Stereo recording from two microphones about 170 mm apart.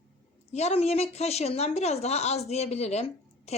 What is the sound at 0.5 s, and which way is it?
A woman's voice, 40° left (ahead or behind).